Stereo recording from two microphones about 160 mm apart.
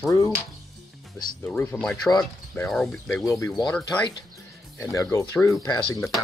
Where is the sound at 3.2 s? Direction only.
20° left (ahead or behind).